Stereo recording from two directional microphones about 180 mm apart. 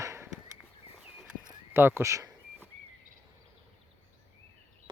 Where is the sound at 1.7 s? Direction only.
15° right (ahead or behind).